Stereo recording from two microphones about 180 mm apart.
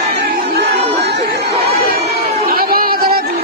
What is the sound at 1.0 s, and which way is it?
Chatter, 65° right (ahead or behind).